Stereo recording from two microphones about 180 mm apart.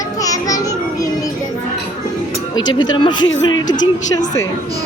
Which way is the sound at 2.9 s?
25° left (ahead or behind).